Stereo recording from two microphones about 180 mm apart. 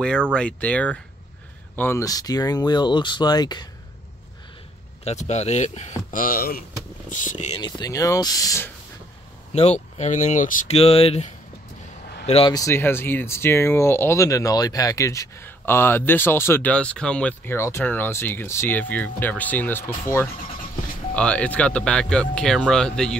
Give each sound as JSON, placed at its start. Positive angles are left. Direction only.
{"t": 0.0, "sound": "speech", "side_deg": 5}
{"t": 5.0, "sound": "speech", "side_deg": 40}
{"t": 7.1, "sound": "speech", "side_deg": 45}
{"t": 7.6, "sound": "speech", "side_deg": 20}
{"t": 9.5, "sound": "speech", "side_deg": 35}
{"t": 12.5, "sound": "speech", "side_deg": 15}